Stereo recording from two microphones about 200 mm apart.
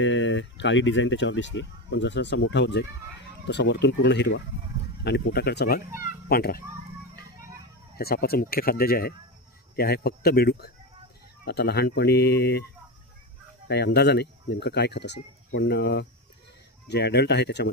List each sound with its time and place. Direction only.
0.0 s a child's voice: 65° left (ahead or behind); by 6.6 s 50° left (ahead or behind)
7.9 s speech: 50° left (ahead or behind)
13.7 s speech: 55° left (ahead or behind)